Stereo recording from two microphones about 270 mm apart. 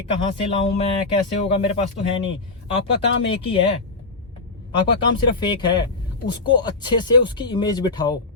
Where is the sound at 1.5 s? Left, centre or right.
Left.